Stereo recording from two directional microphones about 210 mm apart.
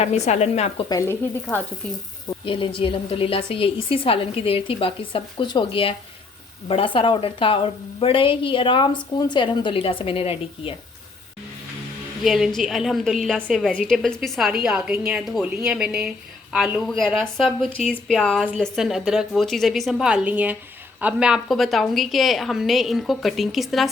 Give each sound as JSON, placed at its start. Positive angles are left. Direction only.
{"t": 0.0, "sound": "a woman's voice", "side_deg": 30}
{"t": 0.9, "sound": "speech", "side_deg": 15}
{"t": 2.4, "sound": "a woman's voice", "side_deg": 25}
{"t": 12.2, "sound": "a woman's voice", "side_deg": 0}